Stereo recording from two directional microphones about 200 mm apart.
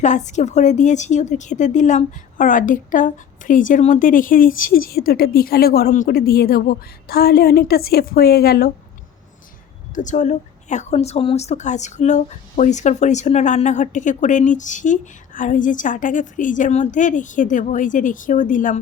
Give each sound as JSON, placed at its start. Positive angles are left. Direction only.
{"t": 0.0, "sound": "a woman's voice", "side_deg": 35}
{"t": 9.9, "sound": "speech", "side_deg": 40}